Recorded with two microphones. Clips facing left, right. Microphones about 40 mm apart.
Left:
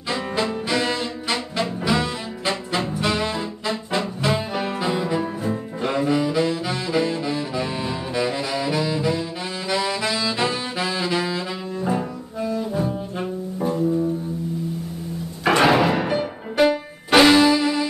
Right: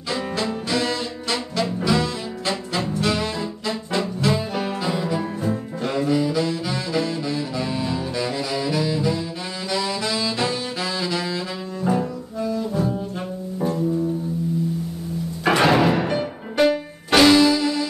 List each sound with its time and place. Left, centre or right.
0.1 s music: centre
9.7 s saxophone: centre
13.6 s music: centre
15.4 s music: centre